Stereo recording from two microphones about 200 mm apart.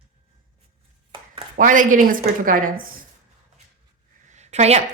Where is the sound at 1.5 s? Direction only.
40° right (ahead or behind).